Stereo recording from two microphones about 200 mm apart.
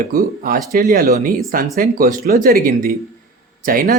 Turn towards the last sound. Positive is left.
turn(degrees=-45)  # may be behind; listen again after turning